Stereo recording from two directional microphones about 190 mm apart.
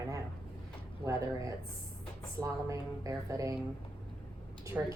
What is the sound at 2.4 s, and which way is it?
Speech, 15° right (ahead or behind).